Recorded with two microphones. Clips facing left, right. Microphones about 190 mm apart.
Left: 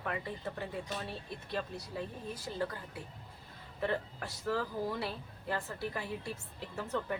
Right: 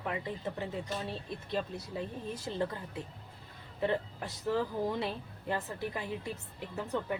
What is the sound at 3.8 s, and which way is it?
Speech, 20° right (ahead or behind).